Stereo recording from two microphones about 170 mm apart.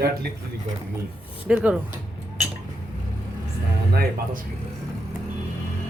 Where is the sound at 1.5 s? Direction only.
5° right (ahead or behind).